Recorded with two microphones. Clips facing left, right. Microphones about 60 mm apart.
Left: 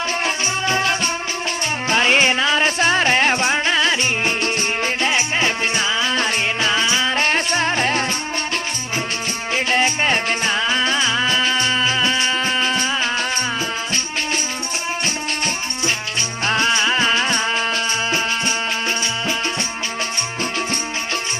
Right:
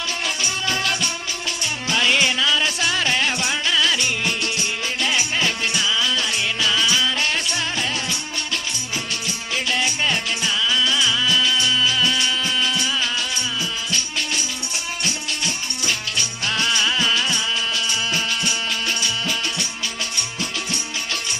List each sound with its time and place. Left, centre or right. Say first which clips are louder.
0.3 s music: left 4 dB; left
9.6 s music: left 4 dB; left
16.5 s music: left 4 dB; left